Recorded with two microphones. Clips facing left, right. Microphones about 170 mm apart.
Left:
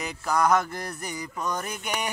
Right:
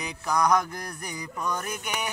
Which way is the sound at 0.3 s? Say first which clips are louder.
Left 1 dB; 5° left (ahead or behind).